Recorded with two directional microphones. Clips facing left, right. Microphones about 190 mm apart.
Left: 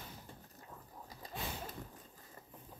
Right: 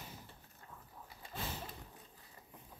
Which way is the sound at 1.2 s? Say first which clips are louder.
Left 2 dB; 40° left (ahead or behind).